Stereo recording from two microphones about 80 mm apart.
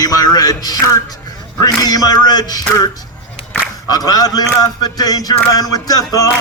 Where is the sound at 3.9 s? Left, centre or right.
Left.